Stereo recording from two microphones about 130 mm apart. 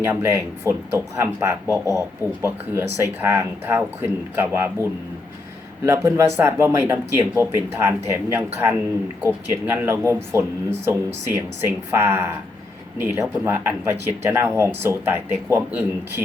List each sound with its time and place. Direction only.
0.0 s speech: 15° right (ahead or behind)
9.6 s speech: 20° right (ahead or behind)